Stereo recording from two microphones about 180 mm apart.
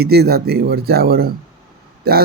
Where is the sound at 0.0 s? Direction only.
60° right (ahead or behind).